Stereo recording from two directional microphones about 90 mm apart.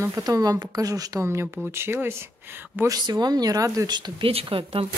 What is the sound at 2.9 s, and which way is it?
Speech, 50° right (ahead or behind).